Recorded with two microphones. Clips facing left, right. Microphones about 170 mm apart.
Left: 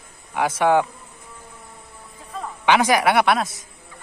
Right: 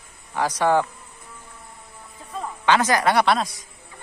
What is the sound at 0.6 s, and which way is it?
Mantra, 10° left (ahead or behind).